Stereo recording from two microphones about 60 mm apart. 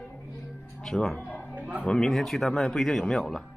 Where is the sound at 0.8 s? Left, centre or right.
Centre.